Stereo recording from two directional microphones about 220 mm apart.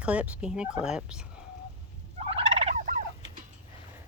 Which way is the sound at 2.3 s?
25° right (ahead or behind).